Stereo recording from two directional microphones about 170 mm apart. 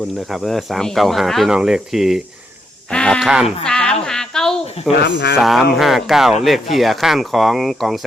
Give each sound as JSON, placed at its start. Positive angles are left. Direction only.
{"t": 0.3, "sound": "speech", "side_deg": 0}
{"t": 4.0, "sound": "a sound", "side_deg": 5}
{"t": 4.9, "sound": "speech", "side_deg": 85}
{"t": 5.4, "sound": "speech", "side_deg": 0}